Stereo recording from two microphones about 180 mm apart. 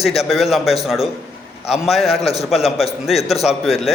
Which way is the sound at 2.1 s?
35° left (ahead or behind).